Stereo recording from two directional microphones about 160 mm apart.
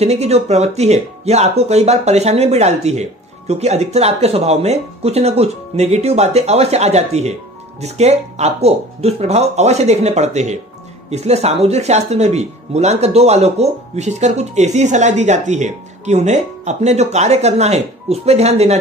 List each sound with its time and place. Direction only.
0.0 s speech: 40° right (ahead or behind)